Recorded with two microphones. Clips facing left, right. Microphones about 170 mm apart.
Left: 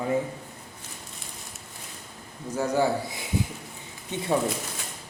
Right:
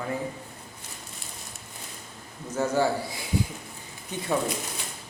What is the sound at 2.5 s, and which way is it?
A man's voice, 15° left (ahead or behind).